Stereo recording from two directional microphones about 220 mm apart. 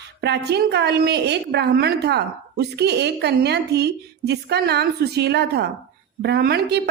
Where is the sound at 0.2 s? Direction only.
50° right (ahead or behind).